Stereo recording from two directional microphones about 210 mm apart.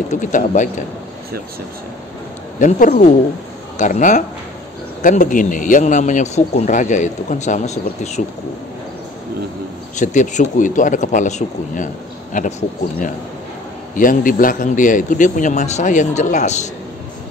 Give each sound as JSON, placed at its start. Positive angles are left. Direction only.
{"t": 0.1, "sound": "speech", "side_deg": 35}
{"t": 2.6, "sound": "speech", "side_deg": 40}
{"t": 9.9, "sound": "speech", "side_deg": 35}